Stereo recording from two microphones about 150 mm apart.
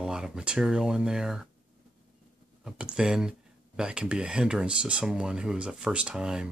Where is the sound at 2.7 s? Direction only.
5° right (ahead or behind).